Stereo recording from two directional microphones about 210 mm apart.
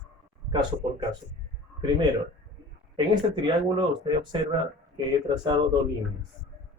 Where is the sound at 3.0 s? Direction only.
20° right (ahead or behind).